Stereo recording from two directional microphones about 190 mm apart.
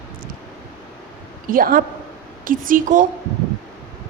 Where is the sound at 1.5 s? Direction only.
50° right (ahead or behind).